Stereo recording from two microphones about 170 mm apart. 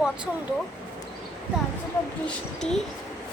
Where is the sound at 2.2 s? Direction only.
5° left (ahead or behind).